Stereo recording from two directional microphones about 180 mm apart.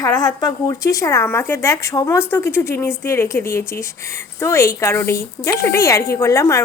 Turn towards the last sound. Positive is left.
turn(degrees=15)  # may be behind; listen again after turning